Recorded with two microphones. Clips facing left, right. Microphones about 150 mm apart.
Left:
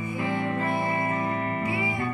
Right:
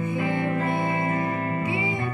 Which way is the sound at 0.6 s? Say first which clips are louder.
Right 2 dB; 20° right (ahead or behind).